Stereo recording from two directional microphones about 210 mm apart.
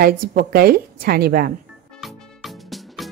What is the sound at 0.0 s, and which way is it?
A woman's voice, 45° right (ahead or behind).